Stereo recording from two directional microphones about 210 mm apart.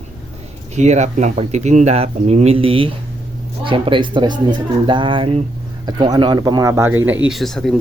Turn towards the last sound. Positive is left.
turn(degrees=0)  # may be behind; listen again after turning